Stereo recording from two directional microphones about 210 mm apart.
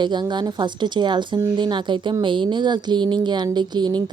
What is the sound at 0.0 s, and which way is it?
Speech, 20° right (ahead or behind).